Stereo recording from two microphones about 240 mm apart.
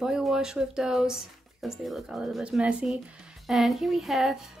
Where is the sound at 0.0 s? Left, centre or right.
Centre.